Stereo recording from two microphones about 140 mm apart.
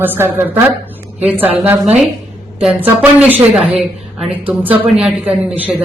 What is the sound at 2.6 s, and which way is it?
A woman's voice, 10° right (ahead or behind).